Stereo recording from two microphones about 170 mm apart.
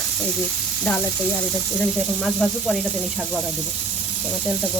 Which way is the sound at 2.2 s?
Centre (ahead or behind).